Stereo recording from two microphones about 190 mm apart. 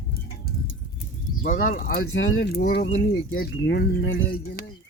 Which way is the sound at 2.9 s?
75° left (ahead or behind).